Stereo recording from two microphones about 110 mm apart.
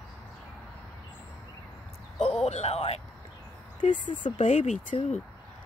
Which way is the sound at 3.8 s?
50° left (ahead or behind).